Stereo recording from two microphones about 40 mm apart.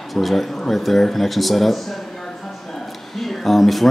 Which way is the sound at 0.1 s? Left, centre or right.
Centre.